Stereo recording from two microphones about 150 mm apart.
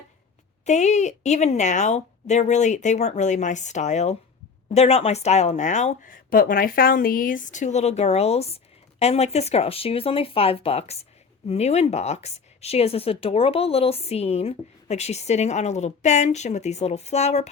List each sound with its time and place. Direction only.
0.6 s speech: 50° left (ahead or behind)